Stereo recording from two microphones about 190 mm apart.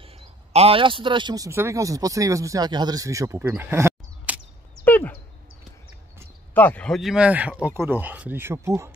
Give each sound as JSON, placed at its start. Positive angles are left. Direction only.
{"t": 0.0, "sound": "a man's voice", "side_deg": -30}
{"t": 4.8, "sound": "a sound", "side_deg": 10}
{"t": 6.5, "sound": "speech", "side_deg": 10}